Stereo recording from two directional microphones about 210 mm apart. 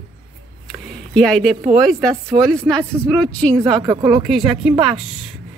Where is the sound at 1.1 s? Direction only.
Centre (ahead or behind).